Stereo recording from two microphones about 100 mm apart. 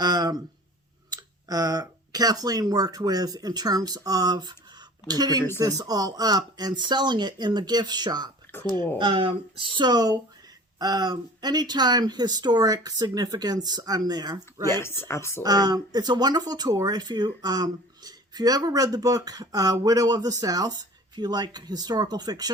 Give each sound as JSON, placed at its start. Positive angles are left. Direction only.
{"t": 0.0, "sound": "a sound", "side_deg": -45}
{"t": 1.1, "sound": "speech", "side_deg": -40}
{"t": 8.5, "sound": "a sound", "side_deg": 20}
{"t": 9.0, "sound": "speech", "side_deg": -55}
{"t": 14.7, "sound": "speech", "side_deg": 25}
{"t": 15.4, "sound": "speech", "side_deg": -40}